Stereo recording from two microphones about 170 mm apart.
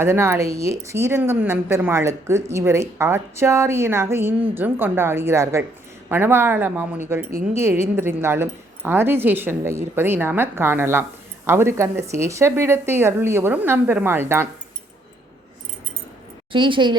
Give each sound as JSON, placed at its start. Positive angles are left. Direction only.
{"t": 0.0, "sound": "speech", "side_deg": -15}
{"t": 7.3, "sound": "speech", "side_deg": -55}
{"t": 7.9, "sound": "speech", "side_deg": -15}
{"t": 16.5, "sound": "a woman's voice", "side_deg": -30}